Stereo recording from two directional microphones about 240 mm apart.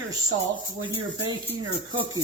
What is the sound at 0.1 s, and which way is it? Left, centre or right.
Speech, centre.